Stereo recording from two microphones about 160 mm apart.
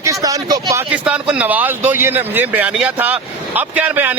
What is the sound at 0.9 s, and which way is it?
Speech, 10° right (ahead or behind).